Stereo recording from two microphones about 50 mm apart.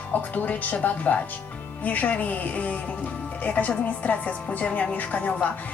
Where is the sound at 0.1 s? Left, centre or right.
Left.